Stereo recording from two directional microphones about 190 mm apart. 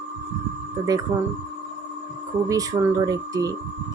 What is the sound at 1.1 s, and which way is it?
Speech, 15° right (ahead or behind).